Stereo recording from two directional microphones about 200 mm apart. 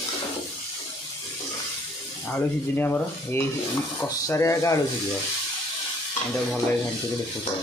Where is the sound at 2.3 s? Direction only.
10° left (ahead or behind).